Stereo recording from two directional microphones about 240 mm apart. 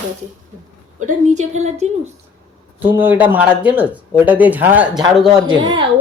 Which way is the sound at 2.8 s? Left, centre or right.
Centre.